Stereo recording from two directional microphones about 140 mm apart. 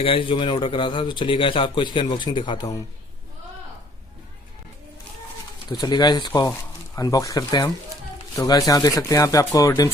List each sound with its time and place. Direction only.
0.0 s a man's voice: 40° left (ahead or behind)
5.6 s a man's voice: 30° left (ahead or behind)